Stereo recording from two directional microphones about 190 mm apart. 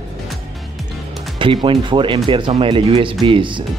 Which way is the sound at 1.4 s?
25° right (ahead or behind).